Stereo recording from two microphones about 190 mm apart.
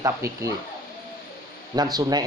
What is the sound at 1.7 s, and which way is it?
Speech, 20° right (ahead or behind).